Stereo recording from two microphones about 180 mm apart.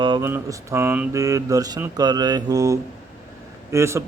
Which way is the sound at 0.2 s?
15° right (ahead or behind).